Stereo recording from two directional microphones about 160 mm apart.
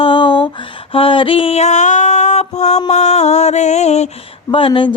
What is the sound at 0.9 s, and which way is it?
Music, 35° left (ahead or behind).